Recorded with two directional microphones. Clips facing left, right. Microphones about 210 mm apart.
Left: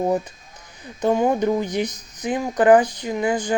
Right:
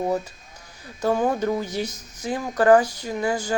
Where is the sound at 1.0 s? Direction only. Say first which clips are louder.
Left 3 dB; 15° left (ahead or behind).